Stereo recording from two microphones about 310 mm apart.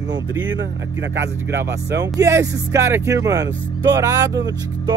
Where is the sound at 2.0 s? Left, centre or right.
Centre.